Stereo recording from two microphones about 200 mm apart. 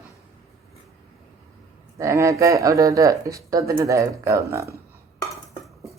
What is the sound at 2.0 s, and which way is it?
Speech, 15° right (ahead or behind).